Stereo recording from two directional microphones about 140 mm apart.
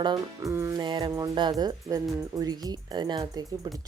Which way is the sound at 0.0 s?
30° right (ahead or behind).